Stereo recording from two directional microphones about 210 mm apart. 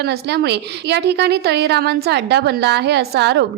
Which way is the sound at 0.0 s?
50° right (ahead or behind).